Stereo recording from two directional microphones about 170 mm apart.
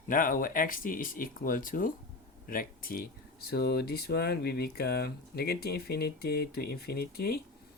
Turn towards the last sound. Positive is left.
turn(degrees=65)  # may be behind; listen again after turning